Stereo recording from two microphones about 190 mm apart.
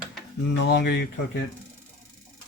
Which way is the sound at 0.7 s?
60° left (ahead or behind).